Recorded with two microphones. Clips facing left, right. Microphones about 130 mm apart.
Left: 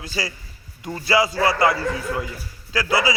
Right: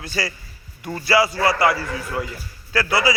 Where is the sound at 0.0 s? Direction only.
15° left (ahead or behind).